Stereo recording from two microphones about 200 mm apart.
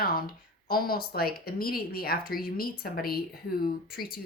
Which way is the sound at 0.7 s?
50° left (ahead or behind).